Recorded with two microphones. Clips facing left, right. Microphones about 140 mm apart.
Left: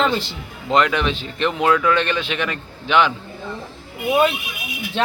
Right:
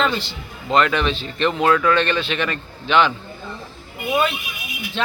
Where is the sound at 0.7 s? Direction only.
15° left (ahead or behind).